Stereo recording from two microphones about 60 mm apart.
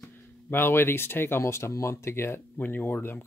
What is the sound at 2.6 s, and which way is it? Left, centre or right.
Speech, left.